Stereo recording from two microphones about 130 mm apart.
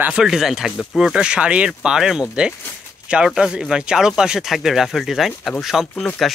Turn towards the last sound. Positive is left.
turn(degrees=0)  # may be behind; listen again after turning